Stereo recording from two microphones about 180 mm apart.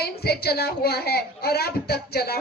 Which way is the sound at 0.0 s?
60° left (ahead or behind).